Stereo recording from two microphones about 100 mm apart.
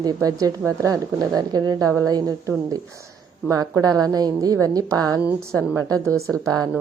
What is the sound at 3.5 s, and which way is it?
A woman's voice, 40° right (ahead or behind).